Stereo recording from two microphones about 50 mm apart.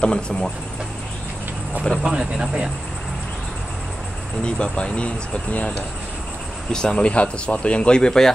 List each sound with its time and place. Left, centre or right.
0.0 s speech: left
2.0 s speech: centre
4.6 s speech: centre
6.7 s speech: centre